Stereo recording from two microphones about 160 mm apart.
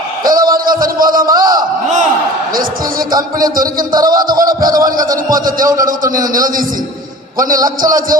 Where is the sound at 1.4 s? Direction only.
25° right (ahead or behind).